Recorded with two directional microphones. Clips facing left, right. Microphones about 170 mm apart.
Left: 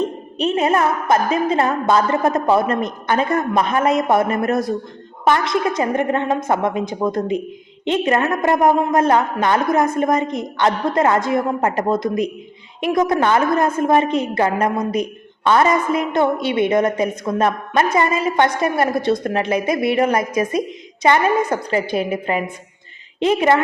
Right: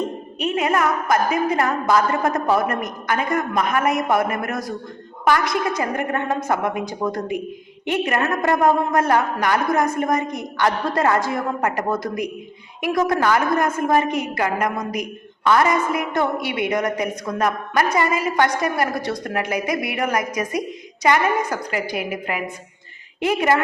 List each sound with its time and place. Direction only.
0.3 s a woman's voice: 35° left (ahead or behind)